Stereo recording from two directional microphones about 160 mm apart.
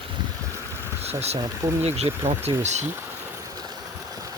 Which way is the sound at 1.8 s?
40° right (ahead or behind).